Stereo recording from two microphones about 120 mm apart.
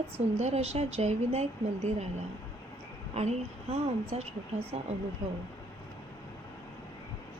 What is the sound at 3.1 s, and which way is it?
Speech, 65° right (ahead or behind).